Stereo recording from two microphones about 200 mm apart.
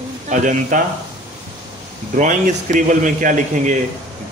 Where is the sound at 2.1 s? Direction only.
40° right (ahead or behind).